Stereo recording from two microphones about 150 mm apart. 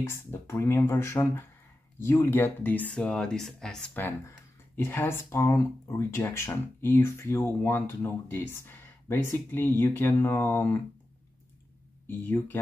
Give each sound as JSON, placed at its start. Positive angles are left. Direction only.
{"t": 0.1, "sound": "speech", "side_deg": 15}
{"t": 12.1, "sound": "speech", "side_deg": 15}